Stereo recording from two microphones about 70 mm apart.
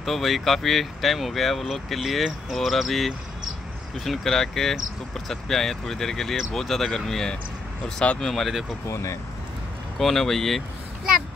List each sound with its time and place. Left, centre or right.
0.0 s speech: centre
8.8 s speech: left
9.9 s speech: centre